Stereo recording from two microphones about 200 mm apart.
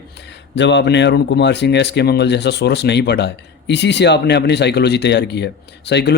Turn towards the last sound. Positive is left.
turn(degrees=55)  # may be behind; listen again after turning